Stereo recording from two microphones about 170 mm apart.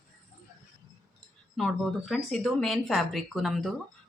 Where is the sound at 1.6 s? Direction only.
Centre (ahead or behind).